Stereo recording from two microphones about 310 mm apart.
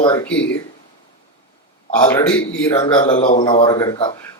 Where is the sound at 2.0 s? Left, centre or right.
Centre.